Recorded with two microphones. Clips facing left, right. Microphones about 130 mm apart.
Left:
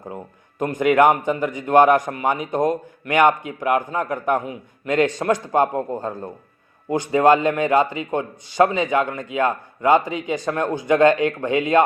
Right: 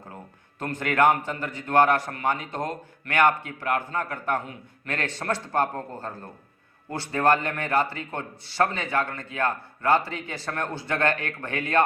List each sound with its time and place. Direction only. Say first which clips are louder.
0.6 s a man's voice: left 6 dB; 15° left (ahead or behind)